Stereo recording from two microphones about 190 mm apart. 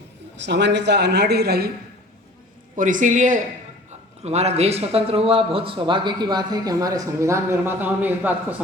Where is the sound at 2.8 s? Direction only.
45° right (ahead or behind).